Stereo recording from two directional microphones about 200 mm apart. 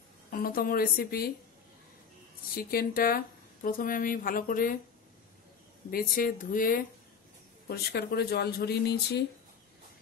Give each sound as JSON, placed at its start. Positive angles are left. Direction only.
{"t": 0.3, "sound": "speech", "side_deg": 45}
{"t": 2.5, "sound": "speech", "side_deg": 45}
{"t": 5.9, "sound": "speech", "side_deg": 45}